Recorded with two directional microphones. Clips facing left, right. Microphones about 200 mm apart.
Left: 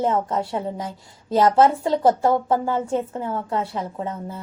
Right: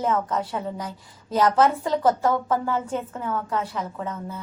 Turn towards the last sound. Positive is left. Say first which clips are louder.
# left 2 dB
turn(degrees=25)  # may be behind; listen again after turning